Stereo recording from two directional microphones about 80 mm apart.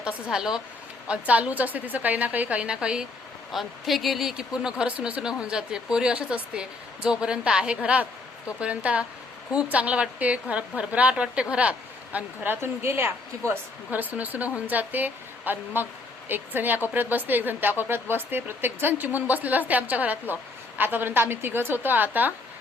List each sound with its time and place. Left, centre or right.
0.0 s a woman's voice: centre